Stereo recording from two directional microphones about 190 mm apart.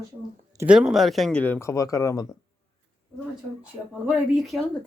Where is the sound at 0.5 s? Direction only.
5° right (ahead or behind); by 2.2 s 15° left (ahead or behind).